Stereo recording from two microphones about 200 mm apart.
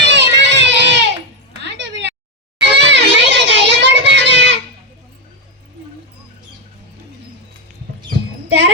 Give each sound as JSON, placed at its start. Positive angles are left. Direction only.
{"t": 0.0, "sound": "a sound", "side_deg": -60}
{"t": 2.6, "sound": "children playing", "side_deg": -60}
{"t": 8.4, "sound": "music", "side_deg": -60}